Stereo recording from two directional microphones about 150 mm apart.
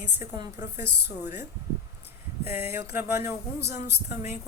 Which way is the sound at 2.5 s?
15° right (ahead or behind).